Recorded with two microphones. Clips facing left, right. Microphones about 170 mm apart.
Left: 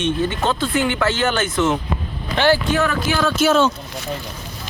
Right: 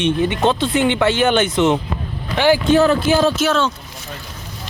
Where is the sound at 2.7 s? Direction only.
30° right (ahead or behind).